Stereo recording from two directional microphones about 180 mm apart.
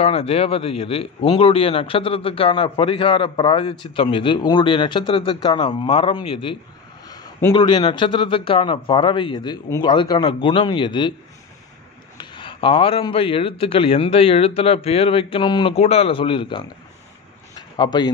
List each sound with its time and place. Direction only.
0.0 s a man's voice: 30° left (ahead or behind)
12.2 s speech: 25° left (ahead or behind)
17.6 s a sound: 25° left (ahead or behind)